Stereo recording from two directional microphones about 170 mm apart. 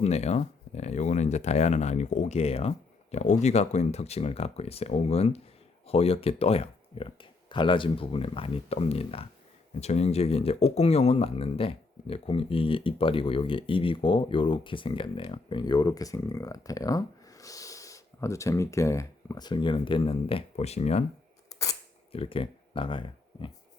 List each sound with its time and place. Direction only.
0.0 s speech: 40° left (ahead or behind)
22.1 s speech: 35° left (ahead or behind)